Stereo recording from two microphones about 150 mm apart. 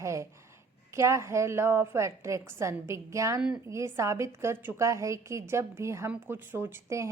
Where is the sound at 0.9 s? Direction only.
20° right (ahead or behind).